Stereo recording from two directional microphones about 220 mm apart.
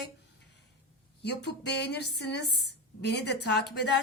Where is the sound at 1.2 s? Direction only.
50° left (ahead or behind).